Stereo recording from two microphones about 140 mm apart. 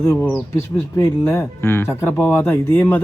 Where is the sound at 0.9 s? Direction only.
15° left (ahead or behind).